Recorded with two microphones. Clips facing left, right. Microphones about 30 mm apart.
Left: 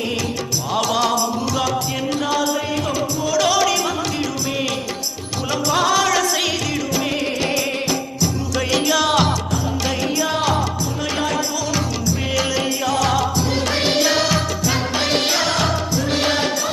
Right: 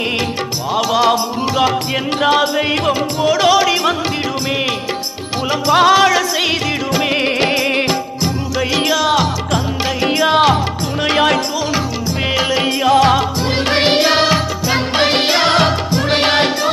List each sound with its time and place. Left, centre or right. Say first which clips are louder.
0.7 s music: right 5 dB; centre
1.1 s music: right 4 dB; right
3.4 s music: right 5 dB; right
5.5 s music: right 7 dB; right
6.9 s music: right 8 dB; right
10.0 s music: right 10 dB; right
11.7 s music: right 3 dB; right